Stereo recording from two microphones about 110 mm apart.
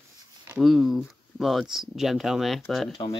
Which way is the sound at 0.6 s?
Centre (ahead or behind).